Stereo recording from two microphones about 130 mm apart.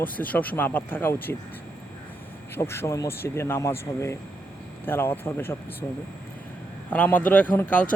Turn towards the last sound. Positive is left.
turn(degrees=10)  # may be behind; listen again after turning